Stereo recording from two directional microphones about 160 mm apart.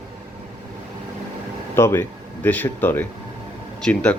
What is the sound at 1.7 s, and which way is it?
Speech, 15° left (ahead or behind).